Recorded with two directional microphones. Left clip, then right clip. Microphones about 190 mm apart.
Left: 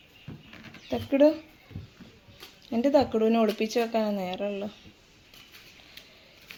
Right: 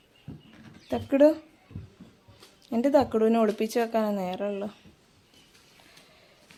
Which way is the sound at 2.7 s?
10° right (ahead or behind).